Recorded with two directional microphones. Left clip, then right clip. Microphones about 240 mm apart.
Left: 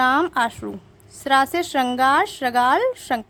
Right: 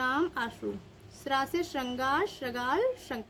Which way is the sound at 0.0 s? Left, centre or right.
Left.